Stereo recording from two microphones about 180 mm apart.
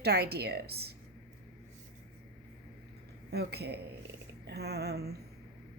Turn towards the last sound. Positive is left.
turn(degrees=-65)  # may be behind; listen again after turning